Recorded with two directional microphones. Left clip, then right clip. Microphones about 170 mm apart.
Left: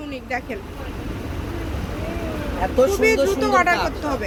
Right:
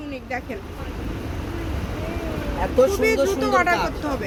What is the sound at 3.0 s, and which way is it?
Speech, 10° left (ahead or behind).